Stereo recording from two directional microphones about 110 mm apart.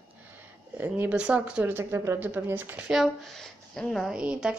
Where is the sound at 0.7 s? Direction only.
15° right (ahead or behind).